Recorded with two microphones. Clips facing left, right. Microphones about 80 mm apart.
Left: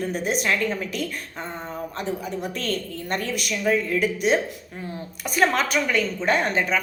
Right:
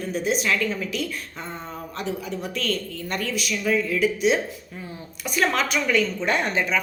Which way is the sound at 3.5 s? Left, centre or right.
Left.